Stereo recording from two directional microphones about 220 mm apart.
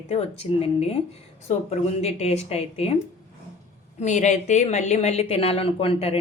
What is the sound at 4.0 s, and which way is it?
A woman's voice, 35° left (ahead or behind).